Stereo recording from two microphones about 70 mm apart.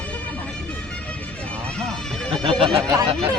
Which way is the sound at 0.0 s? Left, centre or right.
Centre.